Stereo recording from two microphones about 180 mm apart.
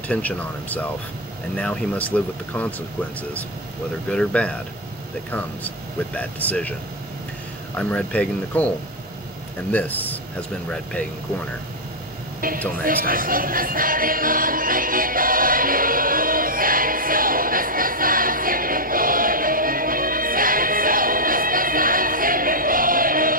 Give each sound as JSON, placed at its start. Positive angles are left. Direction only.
{"t": 0.1, "sound": "speech", "side_deg": 10}
{"t": 4.1, "sound": "speech", "side_deg": 5}
{"t": 6.1, "sound": "speech", "side_deg": 10}
{"t": 7.7, "sound": "speech", "side_deg": 5}
{"t": 12.4, "sound": "music", "side_deg": -50}